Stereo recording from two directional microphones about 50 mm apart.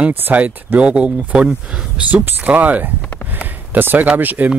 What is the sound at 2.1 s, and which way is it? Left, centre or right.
Speech, right.